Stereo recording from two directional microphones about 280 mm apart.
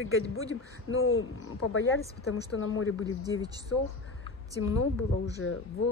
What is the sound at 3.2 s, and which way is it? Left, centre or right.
Speech, centre.